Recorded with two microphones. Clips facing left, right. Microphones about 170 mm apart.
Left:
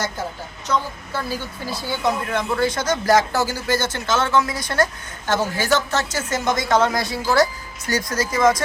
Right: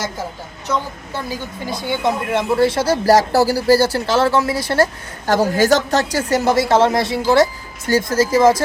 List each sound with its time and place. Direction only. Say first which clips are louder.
1.1 s speech: right 1 dB; 20° right (ahead or behind)